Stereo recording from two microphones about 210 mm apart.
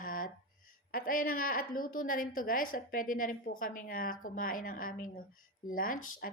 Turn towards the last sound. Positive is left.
turn(degrees=40)  # may be behind; listen again after turning